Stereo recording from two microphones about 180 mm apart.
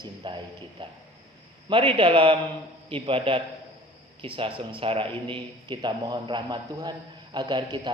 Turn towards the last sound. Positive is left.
turn(degrees=-25)  # may be behind; listen again after turning